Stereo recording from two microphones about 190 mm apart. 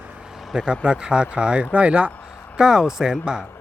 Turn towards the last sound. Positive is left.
turn(degrees=-5)  # may be behind; listen again after turning